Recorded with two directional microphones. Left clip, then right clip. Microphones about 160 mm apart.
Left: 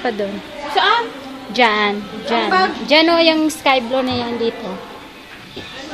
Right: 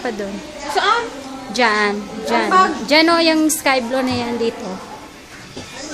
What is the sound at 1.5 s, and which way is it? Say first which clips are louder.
A woman's voice: left 1 dB; 10° left (ahead or behind).